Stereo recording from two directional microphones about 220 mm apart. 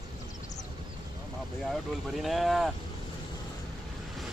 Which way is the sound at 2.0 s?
Centre (ahead or behind).